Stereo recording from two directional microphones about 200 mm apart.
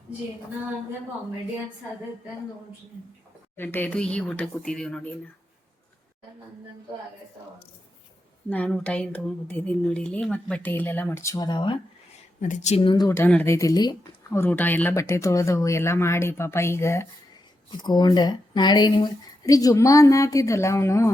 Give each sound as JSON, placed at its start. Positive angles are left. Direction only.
{"t": 3.5, "sound": "speech", "side_deg": 10}
{"t": 8.4, "sound": "speech", "side_deg": 5}
{"t": 12.4, "sound": "speech", "side_deg": 40}